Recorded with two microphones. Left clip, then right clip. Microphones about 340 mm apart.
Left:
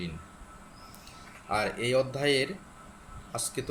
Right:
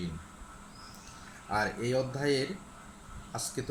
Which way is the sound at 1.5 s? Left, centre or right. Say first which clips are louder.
Left 3 dB; centre.